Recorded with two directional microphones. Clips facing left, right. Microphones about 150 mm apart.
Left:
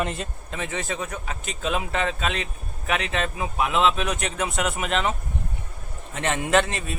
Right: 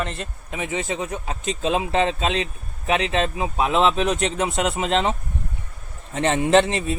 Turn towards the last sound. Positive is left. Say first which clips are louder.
# right 5 dB
turn(degrees=-25)  # may be behind; listen again after turning